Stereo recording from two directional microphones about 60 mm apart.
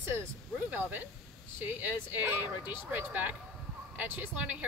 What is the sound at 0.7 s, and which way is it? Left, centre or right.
Speech, right.